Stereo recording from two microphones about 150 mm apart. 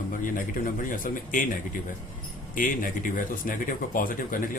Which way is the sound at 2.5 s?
65° left (ahead or behind).